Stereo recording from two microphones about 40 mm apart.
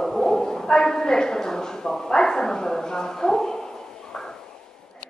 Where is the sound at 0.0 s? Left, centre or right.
Centre.